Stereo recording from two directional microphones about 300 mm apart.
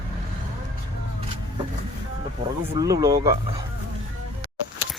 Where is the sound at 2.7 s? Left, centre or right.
Centre.